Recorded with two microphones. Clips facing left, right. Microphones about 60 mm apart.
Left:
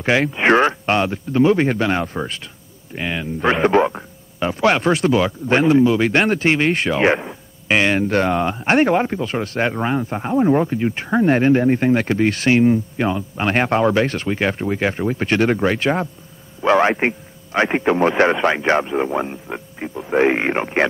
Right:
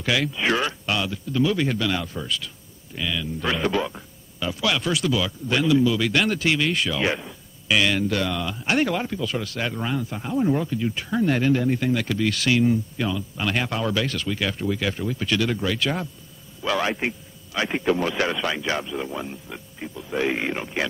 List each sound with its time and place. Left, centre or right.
0.0 s speech: left